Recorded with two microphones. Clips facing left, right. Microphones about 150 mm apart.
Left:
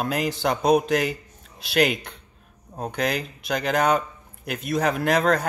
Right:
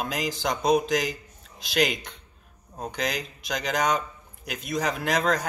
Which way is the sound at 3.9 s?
55° left (ahead or behind).